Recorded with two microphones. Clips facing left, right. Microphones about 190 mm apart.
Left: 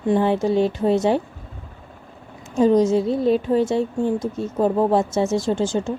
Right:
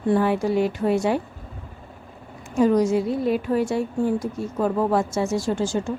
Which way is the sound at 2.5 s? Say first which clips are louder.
Left 2 dB; 20° left (ahead or behind).